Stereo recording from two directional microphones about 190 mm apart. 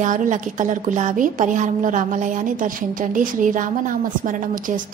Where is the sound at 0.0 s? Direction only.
40° right (ahead or behind).